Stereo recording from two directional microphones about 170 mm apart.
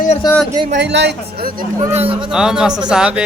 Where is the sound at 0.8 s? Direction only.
90° right; by 1.6 s 60° right (ahead or behind).